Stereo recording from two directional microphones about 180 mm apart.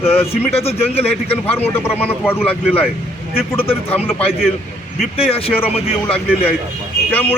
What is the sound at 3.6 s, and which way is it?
Speech, 30° left (ahead or behind).